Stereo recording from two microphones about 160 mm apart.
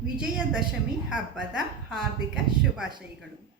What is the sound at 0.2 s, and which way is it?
A woman's voice, 5° right (ahead or behind).